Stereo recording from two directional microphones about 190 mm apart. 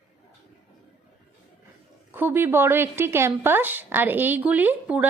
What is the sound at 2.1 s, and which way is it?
Speech, 10° right (ahead or behind).